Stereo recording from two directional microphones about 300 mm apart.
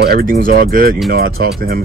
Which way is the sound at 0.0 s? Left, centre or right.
Right.